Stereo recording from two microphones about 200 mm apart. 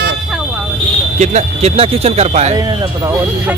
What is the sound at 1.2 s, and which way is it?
Speech, 30° right (ahead or behind).